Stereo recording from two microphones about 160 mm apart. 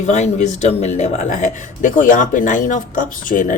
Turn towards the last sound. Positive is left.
turn(degrees=55)  # may be behind; listen again after turning